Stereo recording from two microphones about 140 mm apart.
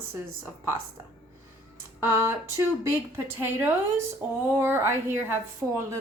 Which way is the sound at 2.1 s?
20° right (ahead or behind).